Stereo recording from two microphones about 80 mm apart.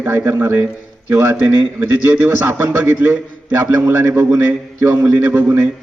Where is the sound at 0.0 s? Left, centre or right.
Right.